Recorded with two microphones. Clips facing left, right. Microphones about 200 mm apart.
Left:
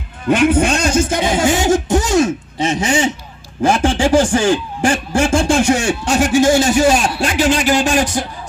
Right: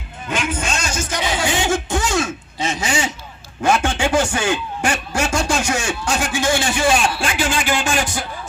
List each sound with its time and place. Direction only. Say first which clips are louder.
0.3 s speech: left 11 dB; 60° left (ahead or behind); by 5.8 s 30° left (ahead or behind)
5.8 s speech: left 5 dB; 60° left (ahead or behind)
6.1 s speech: left 9 dB; 40° left (ahead or behind)